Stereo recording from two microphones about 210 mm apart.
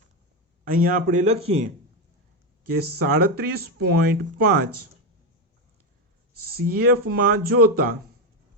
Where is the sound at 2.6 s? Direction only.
50° right (ahead or behind).